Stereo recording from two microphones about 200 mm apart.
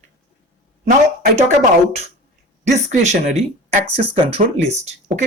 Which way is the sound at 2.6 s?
35° right (ahead or behind).